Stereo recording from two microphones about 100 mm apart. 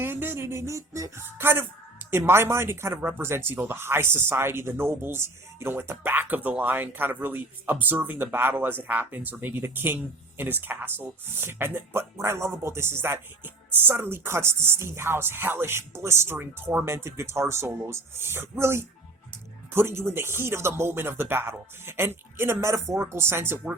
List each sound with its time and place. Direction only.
0.0 s speech: 20° right (ahead or behind)